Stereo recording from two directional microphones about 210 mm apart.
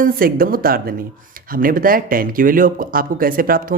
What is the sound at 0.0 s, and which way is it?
Speech, 45° right (ahead or behind).